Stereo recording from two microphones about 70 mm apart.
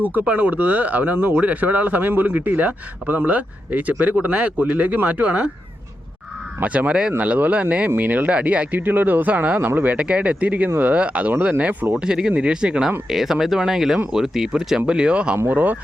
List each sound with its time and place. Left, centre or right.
0.0 s speech: right
6.6 s speech: centre
11.9 s speech: centre
15.4 s speech: right